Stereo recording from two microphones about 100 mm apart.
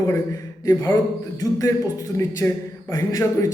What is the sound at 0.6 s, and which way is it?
Speech, 25° left (ahead or behind).